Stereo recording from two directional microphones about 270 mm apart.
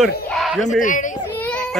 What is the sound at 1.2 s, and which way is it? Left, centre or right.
Baby cry, centre.